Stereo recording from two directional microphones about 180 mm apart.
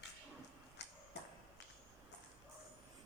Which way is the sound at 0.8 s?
70° left (ahead or behind).